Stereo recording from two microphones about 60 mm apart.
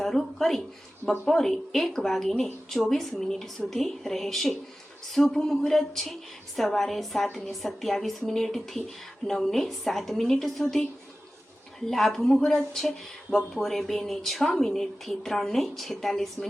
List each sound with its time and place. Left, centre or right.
0.0 s a woman's voice: centre
11.9 s a woman's voice: centre
12.4 s speech: centre
13.3 s a woman's voice: centre